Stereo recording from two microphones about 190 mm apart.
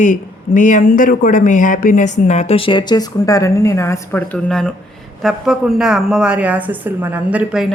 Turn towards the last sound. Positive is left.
turn(degrees=-5)  # may be behind; listen again after turning